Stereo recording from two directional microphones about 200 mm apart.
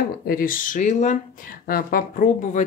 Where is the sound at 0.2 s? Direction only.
45° left (ahead or behind).